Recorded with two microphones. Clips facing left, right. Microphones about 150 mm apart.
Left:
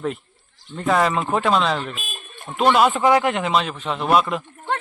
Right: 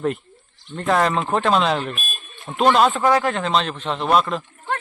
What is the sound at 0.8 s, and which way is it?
Speech, centre (ahead or behind).